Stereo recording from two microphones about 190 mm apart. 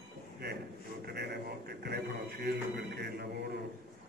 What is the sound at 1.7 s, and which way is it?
Music, 60° right (ahead or behind).